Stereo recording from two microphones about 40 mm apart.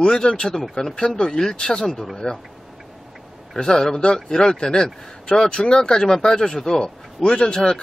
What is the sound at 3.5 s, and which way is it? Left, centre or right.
A man's voice, centre.